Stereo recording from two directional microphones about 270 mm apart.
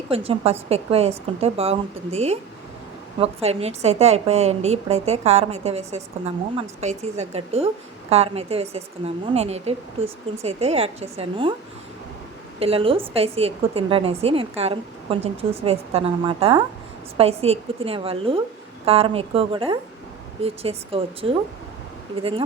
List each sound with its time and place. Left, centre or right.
0.1 s a woman's voice: right
12.5 s a woman's voice: right